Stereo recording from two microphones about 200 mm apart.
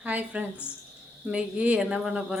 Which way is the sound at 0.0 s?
5° right (ahead or behind).